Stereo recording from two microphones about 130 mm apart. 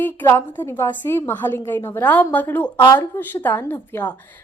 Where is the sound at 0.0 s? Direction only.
15° left (ahead or behind).